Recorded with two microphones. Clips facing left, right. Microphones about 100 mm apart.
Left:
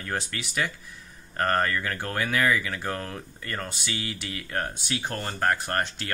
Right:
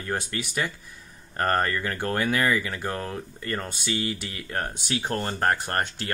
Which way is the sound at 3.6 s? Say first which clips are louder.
Right 5 dB; 40° right (ahead or behind).